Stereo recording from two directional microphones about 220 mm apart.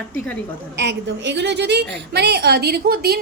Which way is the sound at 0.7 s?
50° right (ahead or behind).